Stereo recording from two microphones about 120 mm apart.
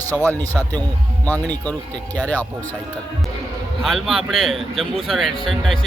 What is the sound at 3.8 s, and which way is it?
A man's voice, centre (ahead or behind).